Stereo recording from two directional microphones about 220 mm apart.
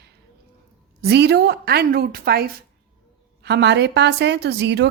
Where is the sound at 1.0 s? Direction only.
50° right (ahead or behind).